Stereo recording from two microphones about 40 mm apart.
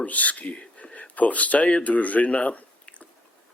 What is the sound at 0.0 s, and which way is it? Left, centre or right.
Speech, left.